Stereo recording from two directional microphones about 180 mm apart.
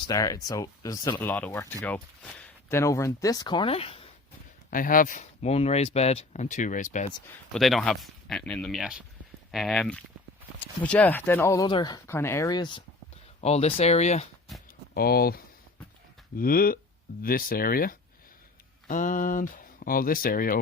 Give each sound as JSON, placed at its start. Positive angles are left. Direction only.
{"t": 0.1, "sound": "speech", "side_deg": 20}
{"t": 4.7, "sound": "speech", "side_deg": 50}
{"t": 7.5, "sound": "speech", "side_deg": 0}
{"t": 13.4, "sound": "speech", "side_deg": 35}
{"t": 14.9, "sound": "speech", "side_deg": 55}